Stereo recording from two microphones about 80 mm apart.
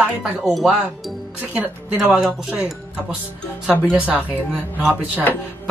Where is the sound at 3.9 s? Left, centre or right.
Centre.